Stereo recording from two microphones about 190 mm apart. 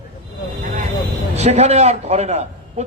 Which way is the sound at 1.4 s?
35° right (ahead or behind).